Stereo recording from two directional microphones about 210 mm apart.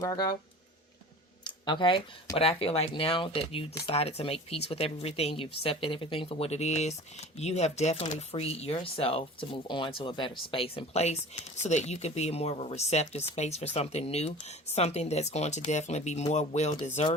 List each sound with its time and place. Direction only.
0.0 s speech: 15° left (ahead or behind)
1.5 s speech: 20° left (ahead or behind)